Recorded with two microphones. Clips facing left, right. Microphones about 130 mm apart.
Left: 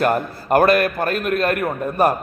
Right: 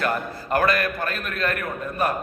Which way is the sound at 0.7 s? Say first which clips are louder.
Left 7 dB; 50° left (ahead or behind).